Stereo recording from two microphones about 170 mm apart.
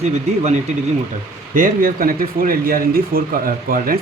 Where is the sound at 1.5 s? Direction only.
55° right (ahead or behind).